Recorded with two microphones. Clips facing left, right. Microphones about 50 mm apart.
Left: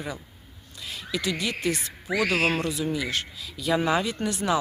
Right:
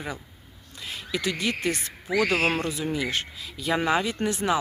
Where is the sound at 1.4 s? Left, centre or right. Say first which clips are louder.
Right 1 dB; right.